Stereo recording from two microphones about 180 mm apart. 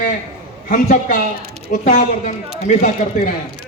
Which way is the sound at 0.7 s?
50° left (ahead or behind).